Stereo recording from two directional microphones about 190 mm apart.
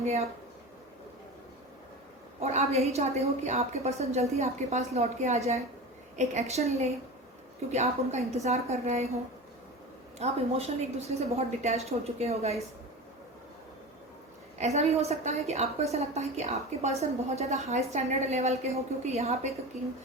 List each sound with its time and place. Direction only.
0.0 s a woman's voice: 35° right (ahead or behind)
2.4 s a woman's voice: 35° right (ahead or behind)
10.2 s a woman's voice: 35° right (ahead or behind)
14.6 s a woman's voice: 35° right (ahead or behind)